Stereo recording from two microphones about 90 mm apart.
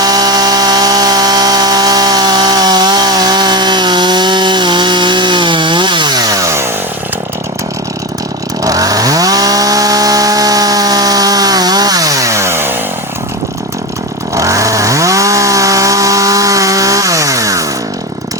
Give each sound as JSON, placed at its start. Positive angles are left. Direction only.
{"t": 0.0, "sound": "chainsaw", "side_deg": -45}
{"t": 8.6, "sound": "chainsaw", "side_deg": -40}
{"t": 14.3, "sound": "chainsaw", "side_deg": -35}